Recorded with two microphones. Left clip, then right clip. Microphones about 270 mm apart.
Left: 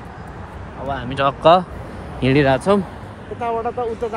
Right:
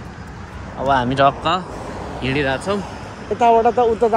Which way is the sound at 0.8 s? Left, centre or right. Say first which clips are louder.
Right 9 dB; right.